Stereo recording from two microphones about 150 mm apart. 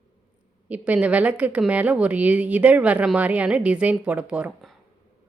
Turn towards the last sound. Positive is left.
turn(degrees=-5)  # may be behind; listen again after turning